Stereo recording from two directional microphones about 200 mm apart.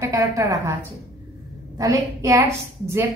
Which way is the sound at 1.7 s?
15° right (ahead or behind).